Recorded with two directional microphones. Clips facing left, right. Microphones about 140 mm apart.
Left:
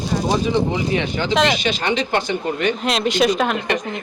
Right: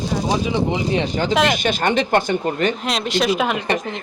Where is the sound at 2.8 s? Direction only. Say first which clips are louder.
Left 3 dB; centre (ahead or behind).